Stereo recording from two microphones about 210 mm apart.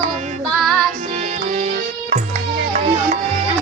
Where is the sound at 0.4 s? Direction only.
Centre (ahead or behind).